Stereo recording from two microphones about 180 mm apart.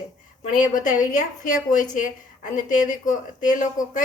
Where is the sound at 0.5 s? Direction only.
45° left (ahead or behind).